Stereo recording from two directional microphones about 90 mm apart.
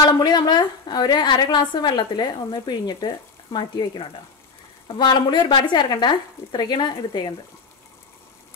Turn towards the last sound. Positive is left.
turn(degrees=55)  # may be behind; listen again after turning